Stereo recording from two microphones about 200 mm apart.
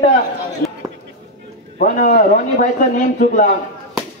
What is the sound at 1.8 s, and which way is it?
Speech, 40° left (ahead or behind).